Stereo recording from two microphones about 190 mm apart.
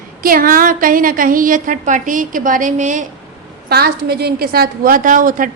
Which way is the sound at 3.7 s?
55° right (ahead or behind).